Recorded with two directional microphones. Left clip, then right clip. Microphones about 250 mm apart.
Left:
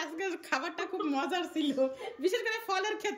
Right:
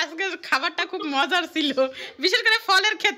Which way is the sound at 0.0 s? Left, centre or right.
Centre.